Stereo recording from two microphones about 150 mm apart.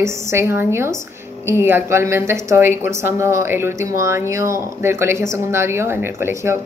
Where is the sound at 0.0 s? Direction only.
15° right (ahead or behind).